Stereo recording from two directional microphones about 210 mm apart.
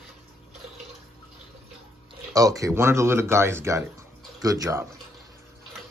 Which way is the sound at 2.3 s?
15° right (ahead or behind).